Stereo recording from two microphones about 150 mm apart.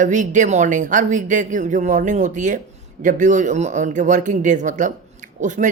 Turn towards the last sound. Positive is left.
turn(degrees=-55)  # may be behind; listen again after turning